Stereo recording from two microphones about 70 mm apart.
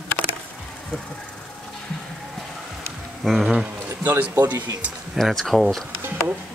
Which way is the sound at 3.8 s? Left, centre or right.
Right.